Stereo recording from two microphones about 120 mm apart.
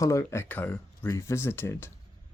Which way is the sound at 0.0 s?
25° left (ahead or behind).